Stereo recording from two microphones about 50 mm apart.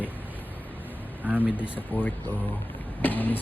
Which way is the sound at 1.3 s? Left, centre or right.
Right.